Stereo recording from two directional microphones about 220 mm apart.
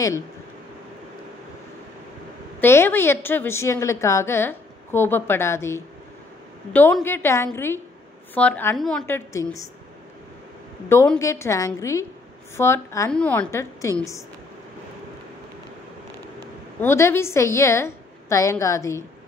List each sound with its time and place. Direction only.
2.6 s a woman's voice: 10° left (ahead or behind)
10.9 s a woman's voice: 15° left (ahead or behind)
16.8 s a woman's voice: 10° left (ahead or behind)